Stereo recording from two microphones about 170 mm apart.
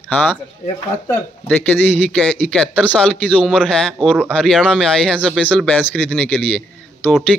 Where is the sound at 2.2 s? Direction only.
5° left (ahead or behind).